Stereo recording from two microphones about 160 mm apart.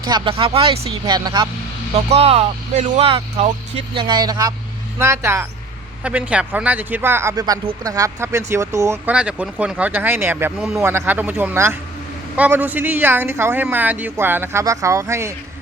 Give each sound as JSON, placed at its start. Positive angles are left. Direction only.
{"t": 0.0, "sound": "speech", "side_deg": -30}
{"t": 2.0, "sound": "speech", "side_deg": -40}
{"t": 3.0, "sound": "speech", "side_deg": -35}
{"t": 3.9, "sound": "speech", "side_deg": -30}